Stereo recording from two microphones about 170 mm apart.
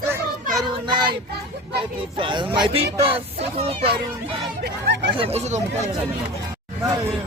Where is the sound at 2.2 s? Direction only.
30° right (ahead or behind).